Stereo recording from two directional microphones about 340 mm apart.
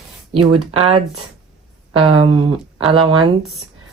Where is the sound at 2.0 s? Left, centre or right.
Right.